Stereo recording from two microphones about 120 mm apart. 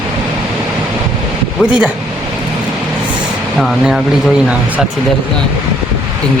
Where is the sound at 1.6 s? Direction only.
10° right (ahead or behind).